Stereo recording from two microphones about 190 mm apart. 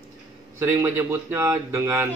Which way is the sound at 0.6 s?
15° right (ahead or behind).